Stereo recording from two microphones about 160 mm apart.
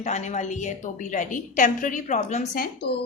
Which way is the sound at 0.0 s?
45° left (ahead or behind).